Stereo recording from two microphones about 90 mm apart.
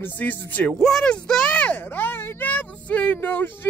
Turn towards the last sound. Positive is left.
turn(degrees=20)  # may be behind; listen again after turning